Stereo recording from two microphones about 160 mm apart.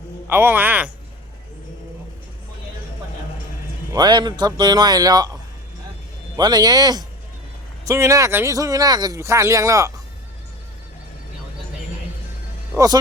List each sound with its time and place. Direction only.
0.3 s speech: 15° right (ahead or behind)
3.9 s speech: 25° right (ahead or behind)
12.7 s speech: 20° right (ahead or behind)